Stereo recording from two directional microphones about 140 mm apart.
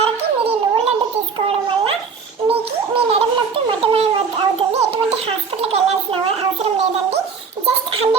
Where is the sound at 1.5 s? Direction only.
40° right (ahead or behind).